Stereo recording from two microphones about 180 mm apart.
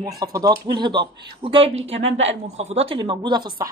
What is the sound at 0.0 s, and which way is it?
Speech, 20° right (ahead or behind).